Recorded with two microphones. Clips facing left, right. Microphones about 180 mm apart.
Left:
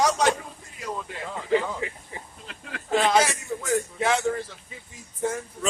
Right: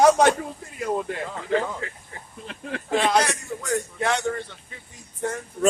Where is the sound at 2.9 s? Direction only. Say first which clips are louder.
Even; centre (ahead or behind).